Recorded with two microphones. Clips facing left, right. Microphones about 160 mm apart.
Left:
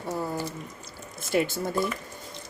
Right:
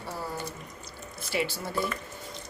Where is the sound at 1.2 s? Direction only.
45° left (ahead or behind).